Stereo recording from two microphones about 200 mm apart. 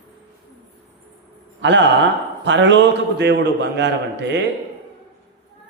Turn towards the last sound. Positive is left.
turn(degrees=-60)  # may be behind; listen again after turning